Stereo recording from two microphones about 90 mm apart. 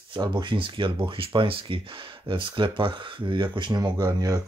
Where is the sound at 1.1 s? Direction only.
80° right.